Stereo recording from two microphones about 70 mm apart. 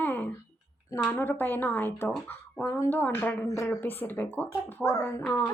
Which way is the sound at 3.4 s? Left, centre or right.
Left.